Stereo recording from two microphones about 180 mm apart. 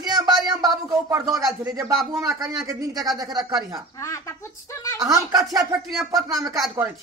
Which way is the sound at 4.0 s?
15° left (ahead or behind).